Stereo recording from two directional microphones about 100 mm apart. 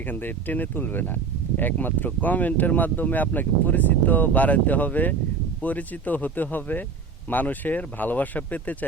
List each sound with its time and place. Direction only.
0.1 s speech: 20° left (ahead or behind)